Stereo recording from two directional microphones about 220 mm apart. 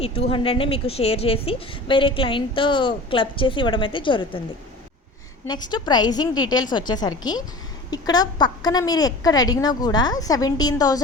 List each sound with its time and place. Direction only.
0.0 s a woman's voice: 25° left (ahead or behind)
5.5 s a woman's voice: 20° left (ahead or behind)